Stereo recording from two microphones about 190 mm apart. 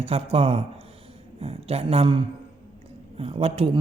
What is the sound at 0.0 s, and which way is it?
Speech, 30° right (ahead or behind).